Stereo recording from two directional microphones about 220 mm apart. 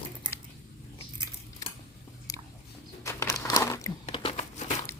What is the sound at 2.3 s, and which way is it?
Biting, 15° left (ahead or behind).